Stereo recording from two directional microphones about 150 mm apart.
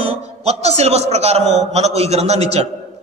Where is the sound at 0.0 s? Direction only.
45° right (ahead or behind).